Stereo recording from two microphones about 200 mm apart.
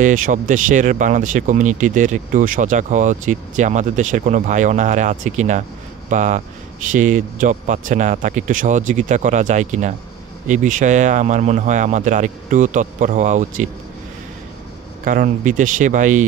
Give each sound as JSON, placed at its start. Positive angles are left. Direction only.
{"t": 0.0, "sound": "speech", "side_deg": -40}
{"t": 15.0, "sound": "speech", "side_deg": -40}